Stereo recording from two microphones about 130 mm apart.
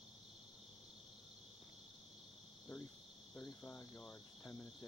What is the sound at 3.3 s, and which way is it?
Cricket, 15° left (ahead or behind).